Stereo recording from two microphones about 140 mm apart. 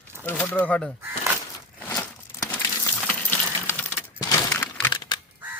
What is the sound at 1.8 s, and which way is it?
Crumpling, 10° left (ahead or behind).